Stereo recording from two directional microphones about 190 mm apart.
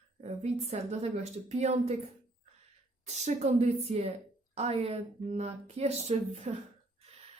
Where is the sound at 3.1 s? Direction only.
35° right (ahead or behind).